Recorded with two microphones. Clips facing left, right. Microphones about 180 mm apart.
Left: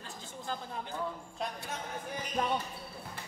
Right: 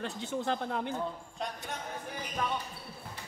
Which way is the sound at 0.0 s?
70° right (ahead or behind).